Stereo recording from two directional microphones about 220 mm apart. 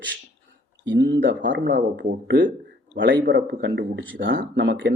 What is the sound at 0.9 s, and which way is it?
Speech, 50° right (ahead or behind).